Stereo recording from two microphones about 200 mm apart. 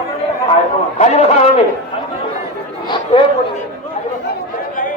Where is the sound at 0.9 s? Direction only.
35° left (ahead or behind).